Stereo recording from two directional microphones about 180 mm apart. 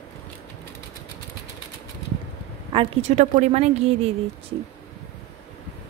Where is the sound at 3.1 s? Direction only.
40° right (ahead or behind).